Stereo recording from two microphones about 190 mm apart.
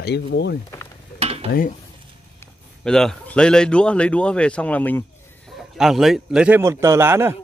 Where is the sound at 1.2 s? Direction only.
30° right (ahead or behind).